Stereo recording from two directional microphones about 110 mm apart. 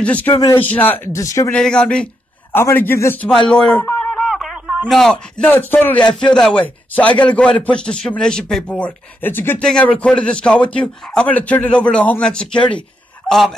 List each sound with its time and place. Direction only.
0.0 s speech: 15° left (ahead or behind)
1.1 s a man's voice: 30° left (ahead or behind)
1.5 s speech: 10° left (ahead or behind)
2.5 s a man's voice: 20° left (ahead or behind)
3.4 s speech: 5° left (ahead or behind)
3.8 s a sound: 15° left (ahead or behind)
4.2 s a sound: centre (ahead or behind)
4.8 s speech: 5° left (ahead or behind)
6.1 s speech: 5° left (ahead or behind)
9.6 s speech: 10° left (ahead or behind)